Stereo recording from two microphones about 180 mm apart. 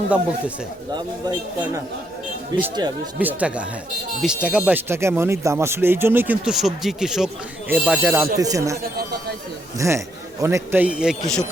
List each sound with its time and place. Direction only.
2.5 s speech: 25° right (ahead or behind)
3.2 s speech: 10° right (ahead or behind)